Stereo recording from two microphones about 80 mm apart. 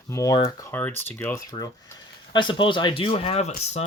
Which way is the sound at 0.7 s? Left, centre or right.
Left.